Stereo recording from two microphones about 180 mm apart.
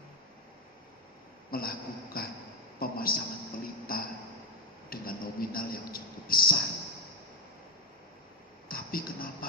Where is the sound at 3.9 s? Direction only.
55° left (ahead or behind).